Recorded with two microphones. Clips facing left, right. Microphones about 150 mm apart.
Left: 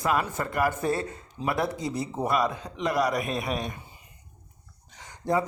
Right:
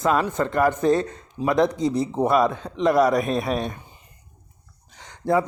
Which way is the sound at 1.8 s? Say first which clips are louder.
Right 8 dB; 20° right (ahead or behind).